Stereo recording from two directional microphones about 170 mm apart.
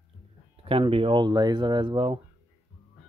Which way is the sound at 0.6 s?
30° right (ahead or behind).